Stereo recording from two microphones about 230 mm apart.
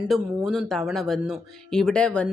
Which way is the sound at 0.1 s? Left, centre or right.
Centre.